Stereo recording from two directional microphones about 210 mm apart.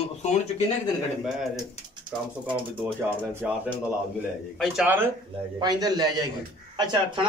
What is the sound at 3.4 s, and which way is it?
Speech, 5° right (ahead or behind).